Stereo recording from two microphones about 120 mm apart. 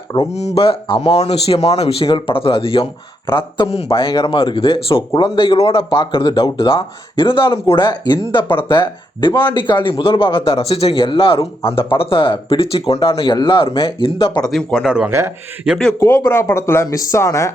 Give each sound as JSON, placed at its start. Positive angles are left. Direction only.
{"t": 0.3, "sound": "speech", "side_deg": 65}
{"t": 1.1, "sound": "speech", "side_deg": 60}
{"t": 14.5, "sound": "speech", "side_deg": 0}
{"t": 16.0, "sound": "speech", "side_deg": 20}